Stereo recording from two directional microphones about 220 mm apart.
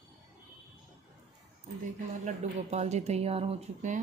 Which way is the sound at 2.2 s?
30° right (ahead or behind).